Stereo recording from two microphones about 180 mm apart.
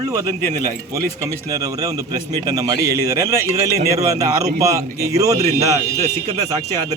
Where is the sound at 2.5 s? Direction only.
20° right (ahead or behind).